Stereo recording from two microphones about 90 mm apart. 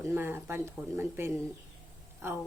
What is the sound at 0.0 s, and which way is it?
Speech, 25° right (ahead or behind).